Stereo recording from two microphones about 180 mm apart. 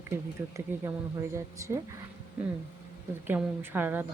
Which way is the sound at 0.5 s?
15° right (ahead or behind).